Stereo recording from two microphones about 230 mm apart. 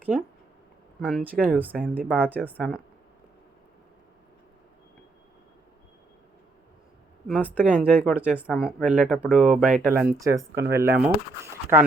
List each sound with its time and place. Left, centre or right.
1.0 s speech: centre
2.0 s speech: centre
7.3 s speech: centre
10.5 s speech: right
10.8 s speech: centre